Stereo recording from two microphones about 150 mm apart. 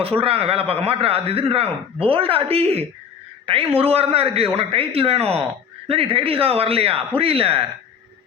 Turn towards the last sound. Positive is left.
turn(degrees=-40)  # may be behind; listen again after turning